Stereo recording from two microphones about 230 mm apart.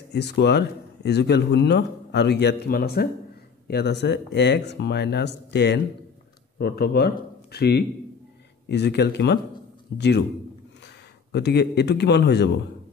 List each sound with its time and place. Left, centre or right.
0.1 s speech: left
11.3 s speech: left